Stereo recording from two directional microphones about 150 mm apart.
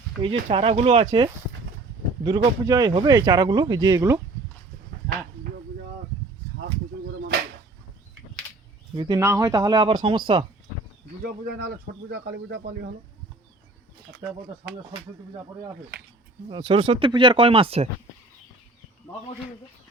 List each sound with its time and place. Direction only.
0.2 s speech: 35° right (ahead or behind)
2.2 s speech: 30° right (ahead or behind)
9.0 s speech: 25° right (ahead or behind)
11.2 s speech: 90° right
16.5 s speech: 30° right (ahead or behind)